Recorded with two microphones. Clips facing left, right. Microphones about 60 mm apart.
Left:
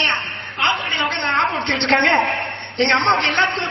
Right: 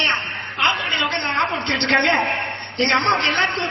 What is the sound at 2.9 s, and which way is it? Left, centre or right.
Speech, left.